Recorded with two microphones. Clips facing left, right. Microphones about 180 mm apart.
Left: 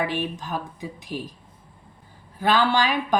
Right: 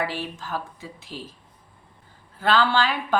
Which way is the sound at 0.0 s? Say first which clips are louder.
Left 3 dB; 20° left (ahead or behind).